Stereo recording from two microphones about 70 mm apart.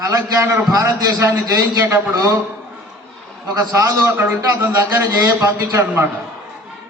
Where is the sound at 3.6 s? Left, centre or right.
Right.